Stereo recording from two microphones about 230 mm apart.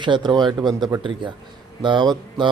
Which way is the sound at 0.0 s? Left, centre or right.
Centre.